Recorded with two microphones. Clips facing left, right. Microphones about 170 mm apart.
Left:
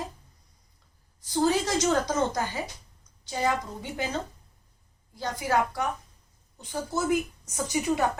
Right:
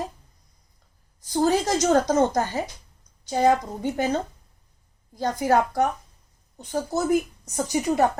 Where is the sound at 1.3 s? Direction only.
45° right (ahead or behind).